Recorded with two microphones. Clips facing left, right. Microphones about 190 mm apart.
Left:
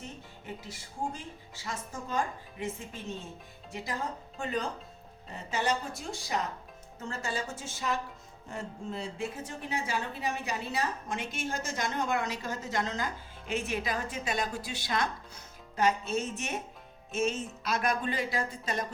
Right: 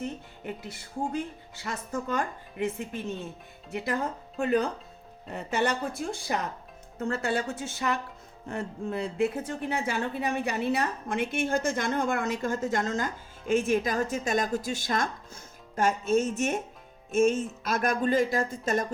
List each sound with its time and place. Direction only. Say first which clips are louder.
0.4 s a woman's voice: right 5 dB; 60° right (ahead or behind)